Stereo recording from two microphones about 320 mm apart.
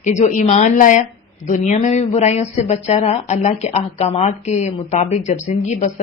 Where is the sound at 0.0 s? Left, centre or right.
Left.